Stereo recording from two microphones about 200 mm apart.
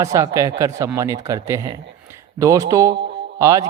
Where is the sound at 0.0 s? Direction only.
15° right (ahead or behind).